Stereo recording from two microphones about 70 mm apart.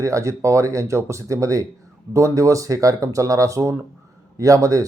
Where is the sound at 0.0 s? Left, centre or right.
Right.